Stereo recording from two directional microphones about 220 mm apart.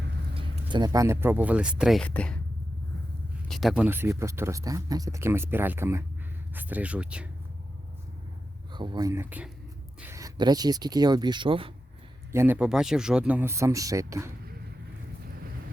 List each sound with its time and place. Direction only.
0.3 s speech: 20° right (ahead or behind); by 2.4 s 5° left (ahead or behind)
3.5 s speech: centre (ahead or behind)
8.7 s speech: 20° right (ahead or behind)
12.3 s speech: 10° right (ahead or behind)